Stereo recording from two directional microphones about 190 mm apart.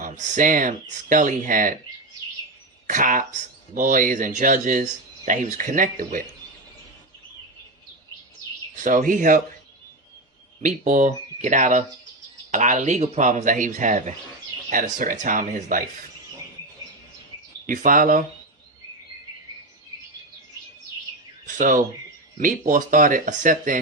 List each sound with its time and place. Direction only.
0.0 s speech: 40° right (ahead or behind)
2.8 s speech: 45° right (ahead or behind)
8.7 s speech: 45° right (ahead or behind)
10.6 s speech: 40° right (ahead or behind)
17.7 s speech: 45° right (ahead or behind)
21.4 s speech: 45° right (ahead or behind)